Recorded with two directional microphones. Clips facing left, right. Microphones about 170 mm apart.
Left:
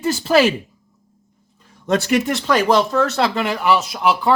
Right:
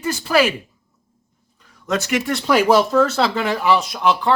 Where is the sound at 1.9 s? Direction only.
30° left (ahead or behind).